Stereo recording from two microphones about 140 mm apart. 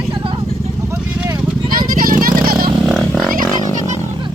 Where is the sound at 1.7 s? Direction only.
90° right.